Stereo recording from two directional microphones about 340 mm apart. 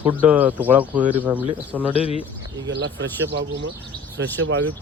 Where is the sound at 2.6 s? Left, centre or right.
Right.